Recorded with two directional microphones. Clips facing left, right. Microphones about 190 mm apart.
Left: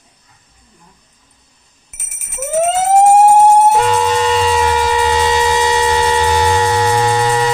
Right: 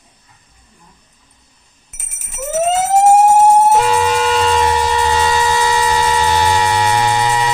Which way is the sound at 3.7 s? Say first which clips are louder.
Even; 5° right (ahead or behind).